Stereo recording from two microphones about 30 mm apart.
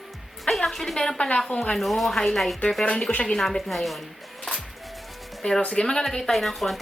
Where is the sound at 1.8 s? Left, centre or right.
Centre.